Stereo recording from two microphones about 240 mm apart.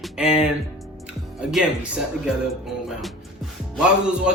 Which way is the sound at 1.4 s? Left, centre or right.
Centre.